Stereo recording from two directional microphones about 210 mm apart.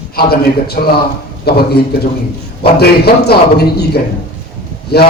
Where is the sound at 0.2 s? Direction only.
45° left (ahead or behind).